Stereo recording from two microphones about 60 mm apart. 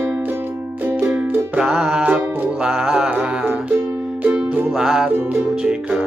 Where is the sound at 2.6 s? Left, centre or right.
Centre.